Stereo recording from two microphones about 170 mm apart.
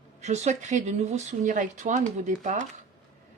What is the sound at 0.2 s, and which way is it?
Speech, 40° right (ahead or behind).